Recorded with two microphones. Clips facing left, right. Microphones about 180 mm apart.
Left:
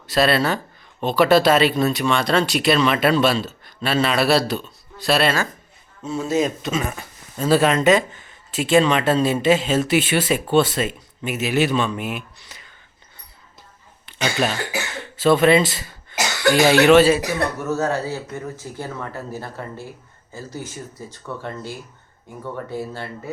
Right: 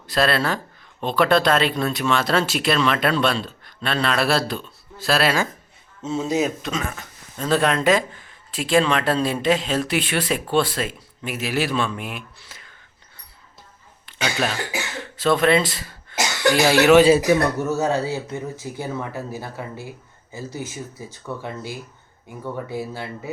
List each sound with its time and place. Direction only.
0.1 s speech: centre (ahead or behind)
6.0 s speech: 20° right (ahead or behind)
6.6 s speech: 5° left (ahead or behind)
14.1 s speech: centre (ahead or behind)